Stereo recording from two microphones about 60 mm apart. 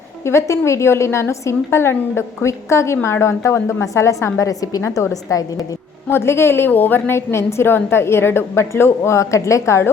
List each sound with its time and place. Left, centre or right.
0.3 s a woman's voice: left
4.8 s a woman's voice: left
5.3 s a woman's voice: left
6.1 s a woman's voice: left